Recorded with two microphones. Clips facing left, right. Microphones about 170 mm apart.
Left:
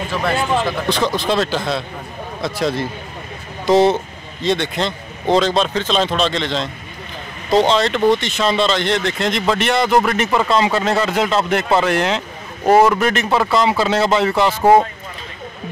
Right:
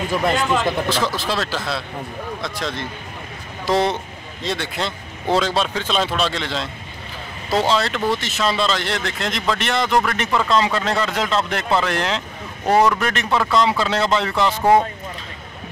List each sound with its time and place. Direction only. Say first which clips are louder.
0.1 s speech: left 1 dB; 15° right (ahead or behind)
0.8 s a man's voice: left 4 dB; 5° right (ahead or behind)
7.4 s speech: left 5 dB; 25° left (ahead or behind)
7.7 s speech: left 5 dB; 5° right (ahead or behind)